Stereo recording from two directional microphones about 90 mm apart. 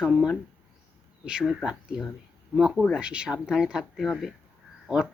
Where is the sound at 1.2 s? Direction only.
10° right (ahead or behind).